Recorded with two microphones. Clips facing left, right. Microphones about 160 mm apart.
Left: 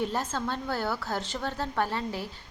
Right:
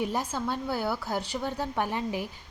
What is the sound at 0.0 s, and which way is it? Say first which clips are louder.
A woman's voice: even; 15° right (ahead or behind).